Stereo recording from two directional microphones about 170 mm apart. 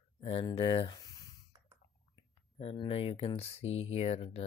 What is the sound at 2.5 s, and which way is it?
Speech, 35° left (ahead or behind).